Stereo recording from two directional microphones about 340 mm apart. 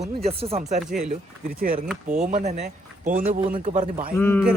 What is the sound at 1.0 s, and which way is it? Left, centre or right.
Speech, right.